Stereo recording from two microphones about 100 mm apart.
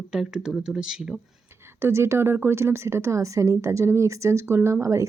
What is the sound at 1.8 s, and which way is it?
A woman's voice, 25° right (ahead or behind).